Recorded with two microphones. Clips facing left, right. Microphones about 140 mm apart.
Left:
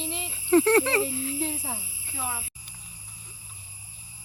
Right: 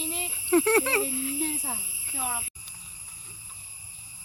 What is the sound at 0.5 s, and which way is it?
Speech, 5° right (ahead or behind).